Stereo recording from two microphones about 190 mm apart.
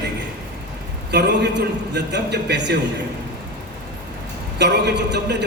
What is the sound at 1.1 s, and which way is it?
A man's voice, 60° right (ahead or behind).